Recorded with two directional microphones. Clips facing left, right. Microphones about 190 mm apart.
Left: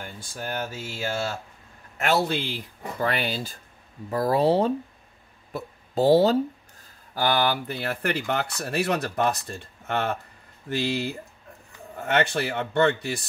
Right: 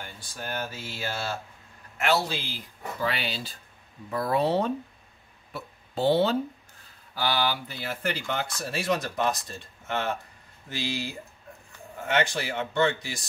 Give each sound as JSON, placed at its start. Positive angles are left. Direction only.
{"t": 0.0, "sound": "speech", "side_deg": 45}
{"t": 4.1, "sound": "speech", "side_deg": 35}
{"t": 5.5, "sound": "a sound", "side_deg": 40}
{"t": 7.2, "sound": "speech", "side_deg": 50}